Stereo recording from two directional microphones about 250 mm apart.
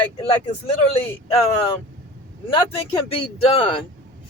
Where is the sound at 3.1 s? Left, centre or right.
Left.